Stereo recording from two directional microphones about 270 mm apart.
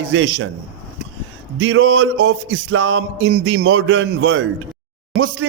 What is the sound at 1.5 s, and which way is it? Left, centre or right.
A man's voice, right.